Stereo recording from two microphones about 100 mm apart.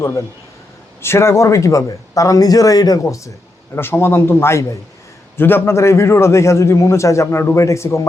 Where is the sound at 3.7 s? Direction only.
25° left (ahead or behind).